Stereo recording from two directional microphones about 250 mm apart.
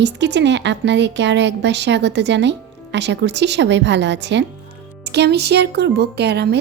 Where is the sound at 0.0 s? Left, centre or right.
Right.